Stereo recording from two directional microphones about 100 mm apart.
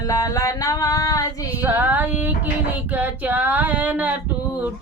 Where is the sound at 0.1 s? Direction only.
35° left (ahead or behind).